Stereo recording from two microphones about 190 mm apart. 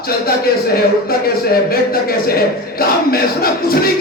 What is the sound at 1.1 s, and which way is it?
A man's voice, 55° left (ahead or behind).